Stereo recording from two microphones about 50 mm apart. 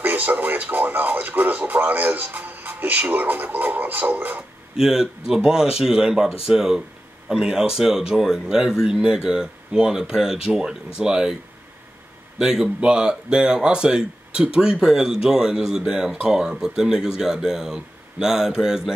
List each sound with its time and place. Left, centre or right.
0.0 s speech: right
4.7 s speech: centre
12.4 s speech: centre